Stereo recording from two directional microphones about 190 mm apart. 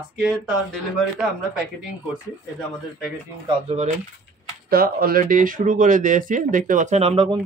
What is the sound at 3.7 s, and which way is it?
Speech, 35° right (ahead or behind).